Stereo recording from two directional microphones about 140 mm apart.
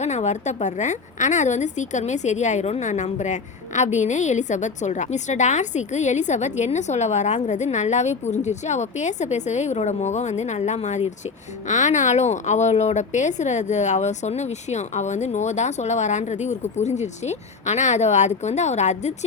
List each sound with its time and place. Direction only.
0.0 s a woman's voice: 55° left (ahead or behind)